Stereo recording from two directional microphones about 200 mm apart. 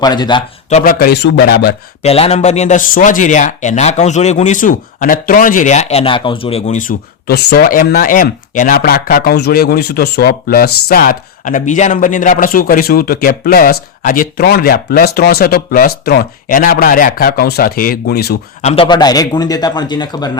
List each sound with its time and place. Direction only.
0.0 s a man's voice: 20° left (ahead or behind)
0.7 s speech: 35° left (ahead or behind)
0.9 s speech: 55° left (ahead or behind)
2.0 s speech: 30° left (ahead or behind); by 18.3 s 55° left (ahead or behind)
18.6 s a man's voice: 30° left (ahead or behind)